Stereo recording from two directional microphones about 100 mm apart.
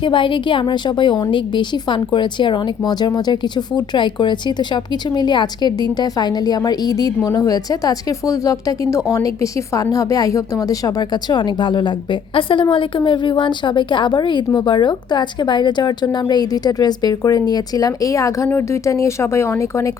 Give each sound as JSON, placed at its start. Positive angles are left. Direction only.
{"t": 0.0, "sound": "a woman's voice", "side_deg": 55}